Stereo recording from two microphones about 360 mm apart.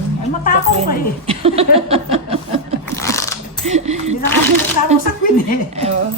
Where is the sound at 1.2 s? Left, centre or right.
Centre.